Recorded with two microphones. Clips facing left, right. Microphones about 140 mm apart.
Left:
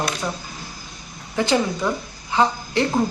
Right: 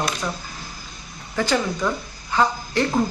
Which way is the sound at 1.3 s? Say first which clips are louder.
Left 2 dB; 20° left (ahead or behind).